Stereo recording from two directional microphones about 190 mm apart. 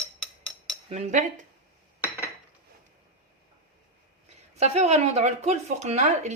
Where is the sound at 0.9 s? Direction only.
35° right (ahead or behind).